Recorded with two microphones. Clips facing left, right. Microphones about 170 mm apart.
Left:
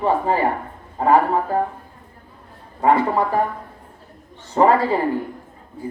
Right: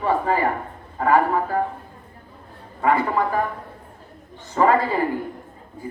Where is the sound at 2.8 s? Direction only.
30° left (ahead or behind).